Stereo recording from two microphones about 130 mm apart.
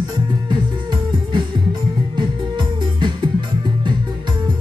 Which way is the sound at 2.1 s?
35° right (ahead or behind).